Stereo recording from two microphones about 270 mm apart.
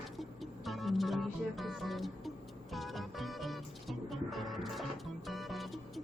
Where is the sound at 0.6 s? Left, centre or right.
Centre.